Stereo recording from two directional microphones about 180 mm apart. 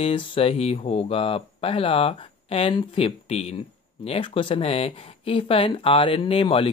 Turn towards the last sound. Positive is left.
turn(degrees=30)  # may be behind; listen again after turning